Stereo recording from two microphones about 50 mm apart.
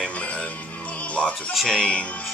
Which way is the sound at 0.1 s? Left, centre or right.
Left.